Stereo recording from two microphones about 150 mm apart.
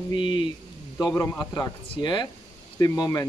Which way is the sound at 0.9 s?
20° left (ahead or behind).